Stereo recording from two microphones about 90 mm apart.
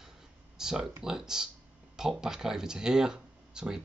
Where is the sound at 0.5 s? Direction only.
5° right (ahead or behind).